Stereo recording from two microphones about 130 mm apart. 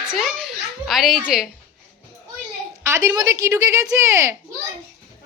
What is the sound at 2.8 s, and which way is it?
A woman's voice, 25° right (ahead or behind).